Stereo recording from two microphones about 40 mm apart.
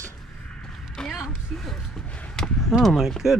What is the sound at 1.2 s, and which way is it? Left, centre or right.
Basketball bounce, centre.